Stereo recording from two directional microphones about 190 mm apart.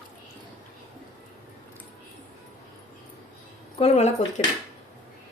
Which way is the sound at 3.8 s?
35° left (ahead or behind).